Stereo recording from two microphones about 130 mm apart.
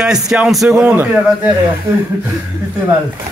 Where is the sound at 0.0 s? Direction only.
5° right (ahead or behind).